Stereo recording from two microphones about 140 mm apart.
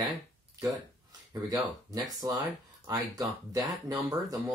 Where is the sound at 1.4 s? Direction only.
25° right (ahead or behind).